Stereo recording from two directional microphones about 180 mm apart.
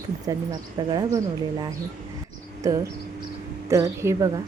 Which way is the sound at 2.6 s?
20° right (ahead or behind).